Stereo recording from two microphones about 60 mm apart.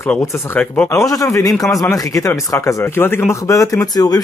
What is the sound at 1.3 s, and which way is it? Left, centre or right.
A man's voice, left.